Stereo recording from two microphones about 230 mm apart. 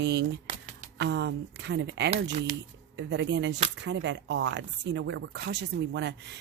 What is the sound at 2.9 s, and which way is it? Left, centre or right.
Speech, right.